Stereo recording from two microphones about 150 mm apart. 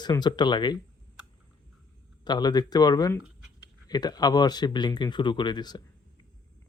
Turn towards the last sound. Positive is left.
turn(degrees=30)  # may be behind; listen again after turning